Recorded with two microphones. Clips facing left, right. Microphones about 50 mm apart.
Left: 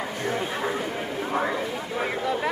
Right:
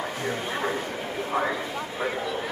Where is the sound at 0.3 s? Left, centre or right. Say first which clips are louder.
Left 2 dB; centre.